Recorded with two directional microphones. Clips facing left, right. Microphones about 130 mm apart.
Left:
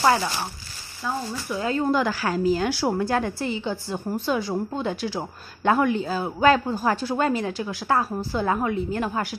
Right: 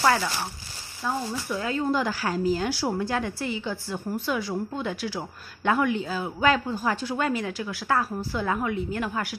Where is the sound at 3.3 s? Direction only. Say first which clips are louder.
Left 3 dB; 25° left (ahead or behind).